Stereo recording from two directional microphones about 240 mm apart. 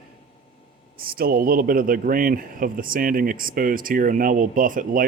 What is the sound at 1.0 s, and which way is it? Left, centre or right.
A man's voice, right.